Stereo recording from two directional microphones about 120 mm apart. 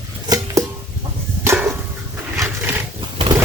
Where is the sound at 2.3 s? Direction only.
20° right (ahead or behind).